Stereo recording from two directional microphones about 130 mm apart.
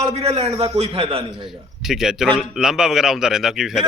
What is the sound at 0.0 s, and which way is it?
A man's voice, 50° right (ahead or behind).